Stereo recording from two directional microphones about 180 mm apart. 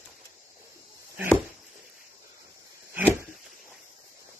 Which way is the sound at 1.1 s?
10° right (ahead or behind).